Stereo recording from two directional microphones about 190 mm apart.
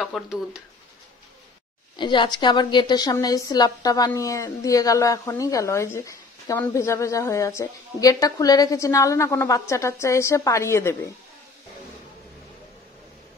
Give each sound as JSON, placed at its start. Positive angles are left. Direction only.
{"t": 0.0, "sound": "speech", "side_deg": 0}
{"t": 2.0, "sound": "a woman's voice", "side_deg": 25}